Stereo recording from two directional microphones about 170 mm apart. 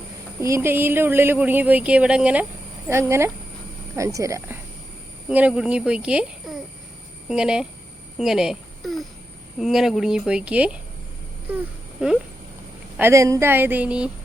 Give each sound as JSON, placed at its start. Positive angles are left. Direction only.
{"t": 0.3, "sound": "a woman's voice", "side_deg": -15}
{"t": 11.5, "sound": "a sound", "side_deg": -5}
{"t": 13.0, "sound": "speech", "side_deg": -15}